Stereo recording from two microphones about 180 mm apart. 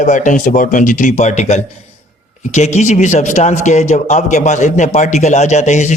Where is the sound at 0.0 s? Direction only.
45° left (ahead or behind).